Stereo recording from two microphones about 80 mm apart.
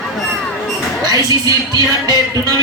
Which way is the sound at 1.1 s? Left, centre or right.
Right.